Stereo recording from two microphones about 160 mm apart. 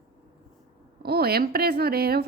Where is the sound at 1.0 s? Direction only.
80° right.